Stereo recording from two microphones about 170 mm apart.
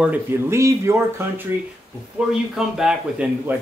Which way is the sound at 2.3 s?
5° right (ahead or behind).